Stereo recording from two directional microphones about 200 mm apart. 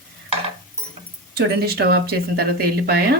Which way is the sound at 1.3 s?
50° right (ahead or behind).